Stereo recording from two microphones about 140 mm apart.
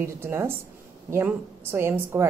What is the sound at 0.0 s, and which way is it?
A woman's voice, 20° right (ahead or behind).